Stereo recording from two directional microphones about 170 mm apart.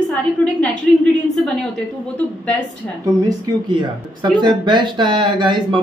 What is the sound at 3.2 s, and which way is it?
Speech, 25° right (ahead or behind).